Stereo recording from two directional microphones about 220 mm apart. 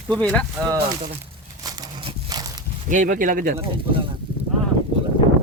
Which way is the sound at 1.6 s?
15° right (ahead or behind).